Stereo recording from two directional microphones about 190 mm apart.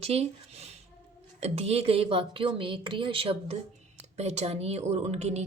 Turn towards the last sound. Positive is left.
turn(degrees=-35)  # may be behind; listen again after turning